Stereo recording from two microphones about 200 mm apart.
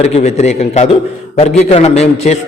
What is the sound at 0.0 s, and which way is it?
A man's voice, 30° left (ahead or behind).